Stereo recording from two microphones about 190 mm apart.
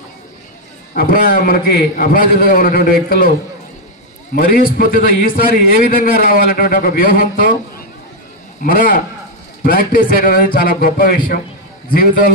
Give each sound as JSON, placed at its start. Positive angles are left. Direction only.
{"t": 0.9, "sound": "a man's voice", "side_deg": 50}
{"t": 4.4, "sound": "a man's voice", "side_deg": 50}
{"t": 8.6, "sound": "a man's voice", "side_deg": 45}